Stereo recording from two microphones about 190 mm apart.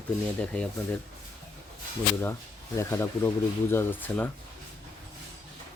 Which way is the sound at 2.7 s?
15° left (ahead or behind).